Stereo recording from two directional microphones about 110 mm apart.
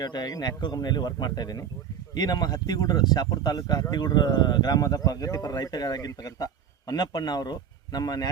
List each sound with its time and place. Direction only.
0.0 s speech: 40° left (ahead or behind)